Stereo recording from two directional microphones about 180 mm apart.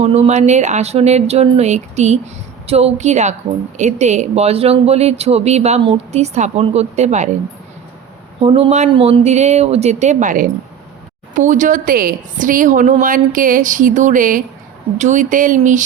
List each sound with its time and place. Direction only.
0.0 s speech: 35° right (ahead or behind)
8.4 s a woman's voice: 30° right (ahead or behind)